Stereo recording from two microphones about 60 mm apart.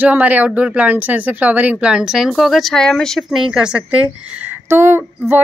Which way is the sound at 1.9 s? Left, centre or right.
Centre.